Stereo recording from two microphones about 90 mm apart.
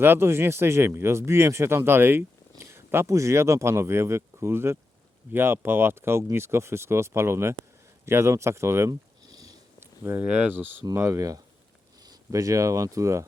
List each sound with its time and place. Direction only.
0.0 s speech: 25° right (ahead or behind)
9.2 s sniff: 45° right (ahead or behind)
9.8 s a sound: 25° right (ahead or behind)
10.2 s speech: 15° right (ahead or behind)
11.0 s speech: 35° right (ahead or behind)